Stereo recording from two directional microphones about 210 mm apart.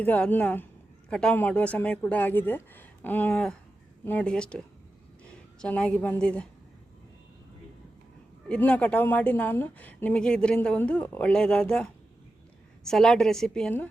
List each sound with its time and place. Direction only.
0.0 s a woman's voice: 5° left (ahead or behind)
5.6 s a woman's voice: 5° left (ahead or behind)
8.4 s a woman's voice: 5° left (ahead or behind)